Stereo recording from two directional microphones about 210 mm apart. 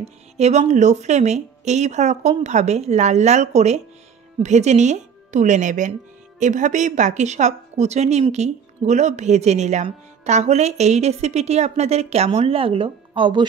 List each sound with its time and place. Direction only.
0.4 s a woman's voice: 30° right (ahead or behind)